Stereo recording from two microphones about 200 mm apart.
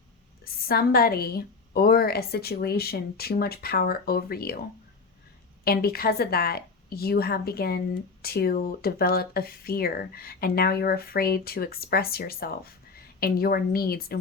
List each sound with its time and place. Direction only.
0.4 s speech: 50° left (ahead or behind)
5.6 s speech: 50° left (ahead or behind)